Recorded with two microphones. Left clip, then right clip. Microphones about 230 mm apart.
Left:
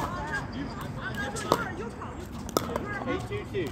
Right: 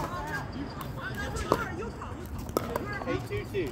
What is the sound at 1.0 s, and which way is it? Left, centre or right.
Speech, right.